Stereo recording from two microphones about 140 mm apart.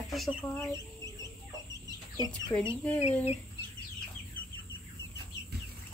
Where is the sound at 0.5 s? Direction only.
15° left (ahead or behind).